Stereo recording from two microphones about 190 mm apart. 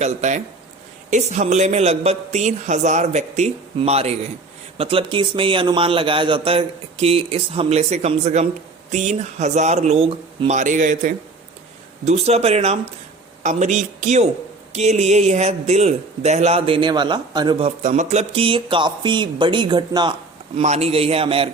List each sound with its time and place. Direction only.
0.0 s a woman's voice: 40° right (ahead or behind)
17.8 s a man's voice: 40° right (ahead or behind); by 20.1 s 20° right (ahead or behind)
20.6 s a woman's voice: 35° right (ahead or behind)